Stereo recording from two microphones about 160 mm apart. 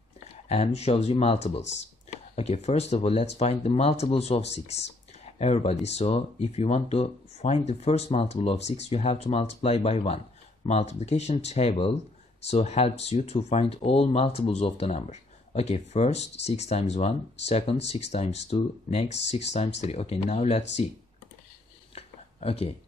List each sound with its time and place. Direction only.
0.5 s speech: 40° left (ahead or behind)
1.6 s speech: 90° left
2.3 s speech: 45° left (ahead or behind)
21.9 s a sound: 35° left (ahead or behind)